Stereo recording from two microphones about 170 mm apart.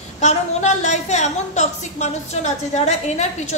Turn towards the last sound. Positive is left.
turn(degrees=40)  # may be behind; listen again after turning